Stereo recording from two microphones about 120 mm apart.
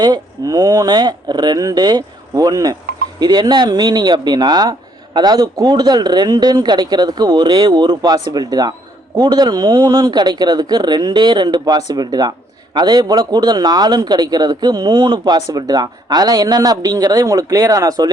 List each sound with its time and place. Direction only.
0.0 s a man's voice: 35° right (ahead or behind)